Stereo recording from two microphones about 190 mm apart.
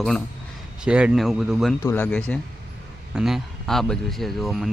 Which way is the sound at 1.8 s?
10° left (ahead or behind).